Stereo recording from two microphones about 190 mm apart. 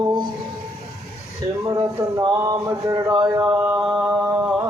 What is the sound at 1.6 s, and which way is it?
Speech, 20° right (ahead or behind).